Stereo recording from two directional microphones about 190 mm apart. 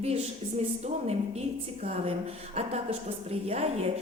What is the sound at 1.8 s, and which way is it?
A woman's voice, 30° right (ahead or behind).